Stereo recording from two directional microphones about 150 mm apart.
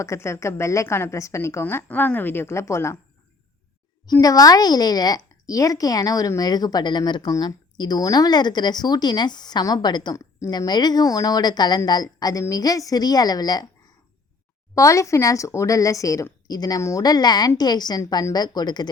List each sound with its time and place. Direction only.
0.0 s a woman's voice: 20° left (ahead or behind)
4.0 s a woman's voice: 25° left (ahead or behind)
14.8 s a woman's voice: 20° left (ahead or behind)